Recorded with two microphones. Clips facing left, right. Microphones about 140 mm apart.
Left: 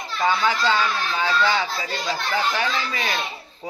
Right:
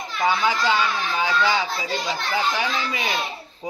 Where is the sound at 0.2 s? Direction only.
15° right (ahead or behind).